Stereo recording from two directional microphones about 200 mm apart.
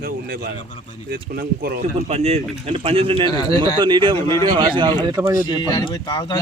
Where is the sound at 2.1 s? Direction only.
35° right (ahead or behind); by 5.4 s 15° right (ahead or behind).